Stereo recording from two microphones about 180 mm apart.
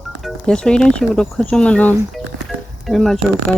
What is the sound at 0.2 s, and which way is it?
Speech, centre (ahead or behind).